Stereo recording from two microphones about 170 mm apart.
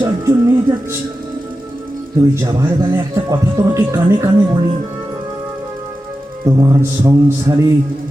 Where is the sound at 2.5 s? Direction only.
20° right (ahead or behind).